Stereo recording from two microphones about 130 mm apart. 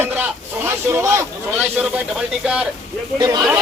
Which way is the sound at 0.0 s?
15° right (ahead or behind).